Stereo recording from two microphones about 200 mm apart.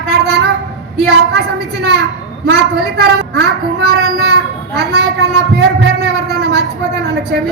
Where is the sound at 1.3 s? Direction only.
55° right (ahead or behind).